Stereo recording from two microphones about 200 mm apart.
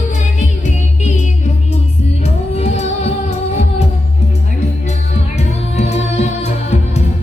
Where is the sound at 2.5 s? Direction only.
35° left (ahead or behind).